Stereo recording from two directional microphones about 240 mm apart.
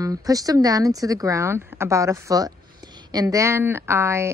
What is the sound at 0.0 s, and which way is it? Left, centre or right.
A woman's voice, centre.